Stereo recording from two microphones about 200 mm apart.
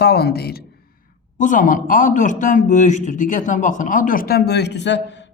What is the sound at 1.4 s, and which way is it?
A man's voice, 40° left (ahead or behind).